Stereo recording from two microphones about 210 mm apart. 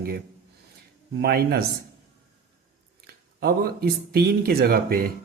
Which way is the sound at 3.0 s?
50° right (ahead or behind).